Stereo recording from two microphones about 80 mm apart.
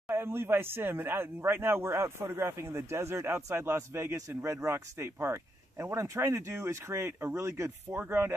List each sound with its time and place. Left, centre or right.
0.1 s speech: right